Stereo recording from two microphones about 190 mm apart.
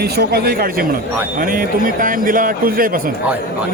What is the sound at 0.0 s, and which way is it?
Speech, 55° right (ahead or behind).